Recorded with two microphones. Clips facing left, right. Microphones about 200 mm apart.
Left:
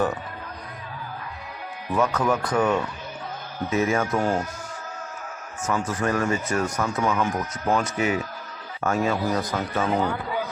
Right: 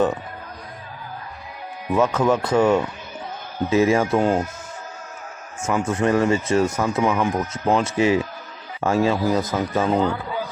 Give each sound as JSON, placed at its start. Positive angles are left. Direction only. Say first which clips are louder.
{"t": 2.0, "sound": "speech", "louder": "right 4 dB", "side_deg": -25}
{"t": 5.6, "sound": "speech", "louder": "right 5 dB", "side_deg": -25}